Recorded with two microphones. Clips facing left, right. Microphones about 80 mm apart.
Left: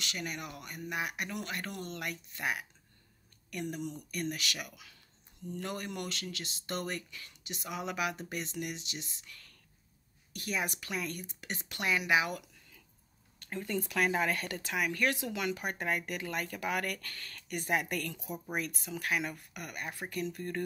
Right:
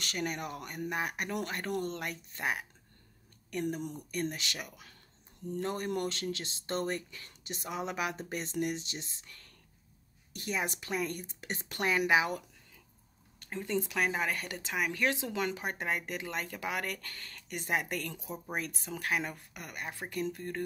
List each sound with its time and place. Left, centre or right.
0.0 s speech: right
13.5 s speech: centre